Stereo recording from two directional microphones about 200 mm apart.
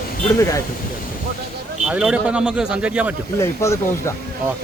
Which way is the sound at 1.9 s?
5° right (ahead or behind).